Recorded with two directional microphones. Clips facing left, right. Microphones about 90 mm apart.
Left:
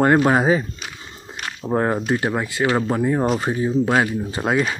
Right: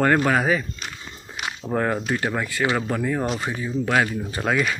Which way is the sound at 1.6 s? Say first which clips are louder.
Left 4 dB; 20° left (ahead or behind).